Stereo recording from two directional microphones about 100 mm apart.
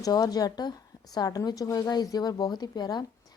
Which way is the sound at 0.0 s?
40° left (ahead or behind).